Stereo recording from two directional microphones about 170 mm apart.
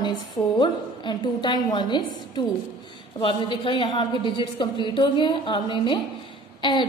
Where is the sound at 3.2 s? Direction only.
30° left (ahead or behind).